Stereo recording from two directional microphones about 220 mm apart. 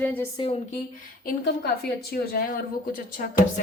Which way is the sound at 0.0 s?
10° left (ahead or behind).